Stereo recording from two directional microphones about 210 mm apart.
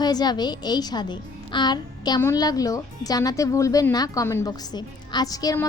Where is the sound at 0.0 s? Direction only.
20° left (ahead or behind).